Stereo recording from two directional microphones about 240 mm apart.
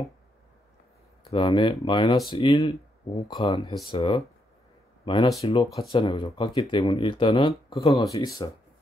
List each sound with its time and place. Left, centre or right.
1.3 s speech: left